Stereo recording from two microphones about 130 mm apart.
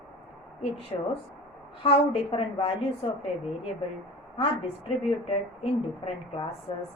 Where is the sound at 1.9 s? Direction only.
45° left (ahead or behind).